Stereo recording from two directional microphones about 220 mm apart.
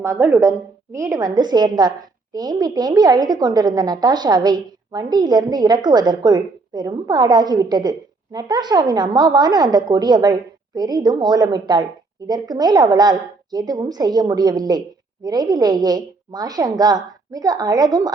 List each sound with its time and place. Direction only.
0.0 s a woman's voice: 15° right (ahead or behind)